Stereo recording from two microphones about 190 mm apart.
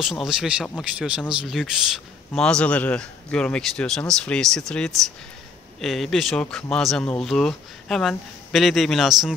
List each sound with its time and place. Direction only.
0.2 s speech: 5° right (ahead or behind)